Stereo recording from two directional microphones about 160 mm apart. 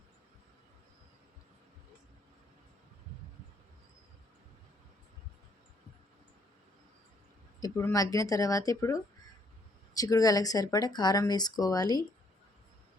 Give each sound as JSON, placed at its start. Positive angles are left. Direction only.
{"t": 7.6, "sound": "speech", "side_deg": 20}